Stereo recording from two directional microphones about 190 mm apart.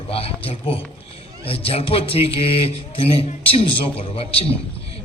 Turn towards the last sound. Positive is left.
turn(degrees=30)  # may be behind; listen again after turning